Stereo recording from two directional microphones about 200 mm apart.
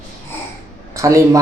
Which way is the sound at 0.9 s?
15° right (ahead or behind).